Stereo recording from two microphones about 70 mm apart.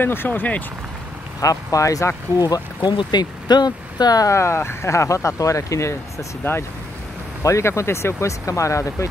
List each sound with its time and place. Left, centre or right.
0.0 s speech: left
1.4 s speech: left
2.3 s speech: left
4.3 s speech: left